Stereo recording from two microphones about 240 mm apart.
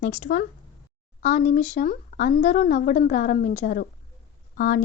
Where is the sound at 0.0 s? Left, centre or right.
Left.